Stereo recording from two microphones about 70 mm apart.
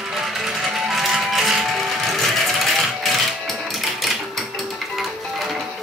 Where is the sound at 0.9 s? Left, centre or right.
Centre.